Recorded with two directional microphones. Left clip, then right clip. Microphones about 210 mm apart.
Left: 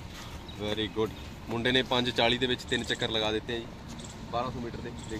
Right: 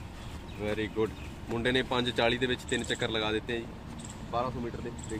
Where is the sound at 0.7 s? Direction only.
20° left (ahead or behind).